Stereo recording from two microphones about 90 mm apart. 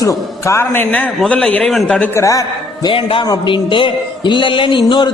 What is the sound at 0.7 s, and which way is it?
A man's voice, 15° left (ahead or behind).